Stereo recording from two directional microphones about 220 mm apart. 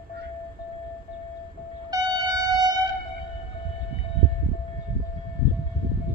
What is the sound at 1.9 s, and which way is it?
Train, 15° right (ahead or behind).